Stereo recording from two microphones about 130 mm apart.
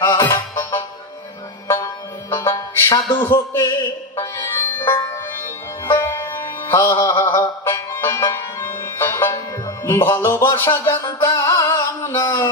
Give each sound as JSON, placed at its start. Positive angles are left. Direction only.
{"t": 0.0, "sound": "music", "side_deg": 20}
{"t": 6.7, "sound": "music", "side_deg": 20}
{"t": 9.8, "sound": "speech", "side_deg": 20}
{"t": 11.1, "sound": "music", "side_deg": 20}